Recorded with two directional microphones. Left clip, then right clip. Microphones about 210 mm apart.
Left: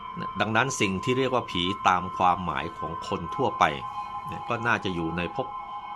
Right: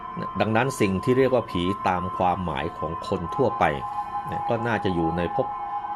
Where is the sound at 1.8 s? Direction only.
10° left (ahead or behind).